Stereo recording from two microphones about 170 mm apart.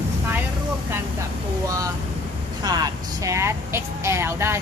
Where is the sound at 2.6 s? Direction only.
25° right (ahead or behind).